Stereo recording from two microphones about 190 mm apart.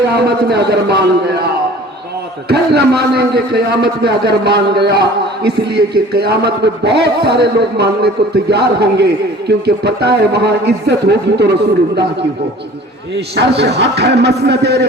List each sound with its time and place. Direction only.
0.1 s a man's voice: 60° right (ahead or behind)
2.5 s a man's voice: 55° right (ahead or behind)
13.1 s a man's voice: 60° right (ahead or behind)